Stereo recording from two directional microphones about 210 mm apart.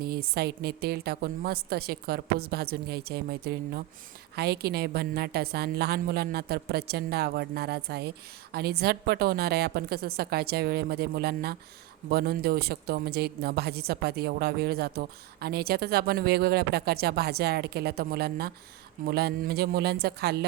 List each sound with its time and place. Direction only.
0.0 s a woman's voice: 45° right (ahead or behind)